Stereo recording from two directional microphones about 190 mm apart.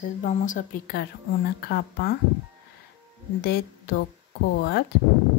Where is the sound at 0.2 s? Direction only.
40° left (ahead or behind).